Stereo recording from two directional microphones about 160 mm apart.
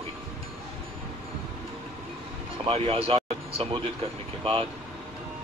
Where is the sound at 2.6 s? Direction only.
35° right (ahead or behind).